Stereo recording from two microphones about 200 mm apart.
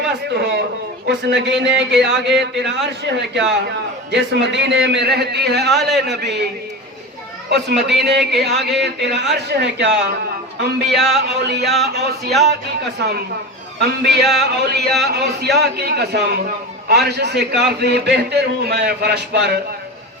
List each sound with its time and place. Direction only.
0.1 s a man's voice: 55° right (ahead or behind)
2.0 s speech: centre (ahead or behind)
2.8 s a man's voice: 60° right (ahead or behind)
7.5 s a man's voice: 55° right (ahead or behind)